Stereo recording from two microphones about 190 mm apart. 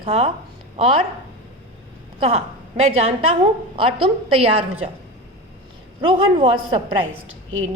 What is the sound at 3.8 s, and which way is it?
Speech, 30° right (ahead or behind).